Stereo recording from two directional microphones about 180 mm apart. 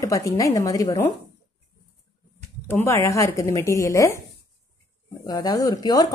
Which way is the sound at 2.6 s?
15° left (ahead or behind).